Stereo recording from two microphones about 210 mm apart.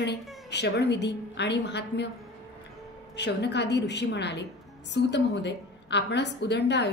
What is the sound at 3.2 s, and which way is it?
A woman's voice, 55° left (ahead or behind).